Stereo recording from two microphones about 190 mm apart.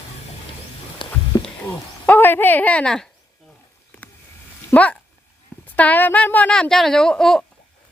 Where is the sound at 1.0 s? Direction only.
25° left (ahead or behind).